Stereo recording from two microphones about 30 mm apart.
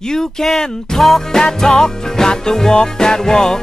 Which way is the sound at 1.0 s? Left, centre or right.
Centre.